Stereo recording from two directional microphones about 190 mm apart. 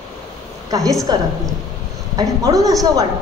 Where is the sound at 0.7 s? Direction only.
20° right (ahead or behind).